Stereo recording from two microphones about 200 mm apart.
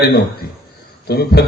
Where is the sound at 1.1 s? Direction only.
55° left (ahead or behind).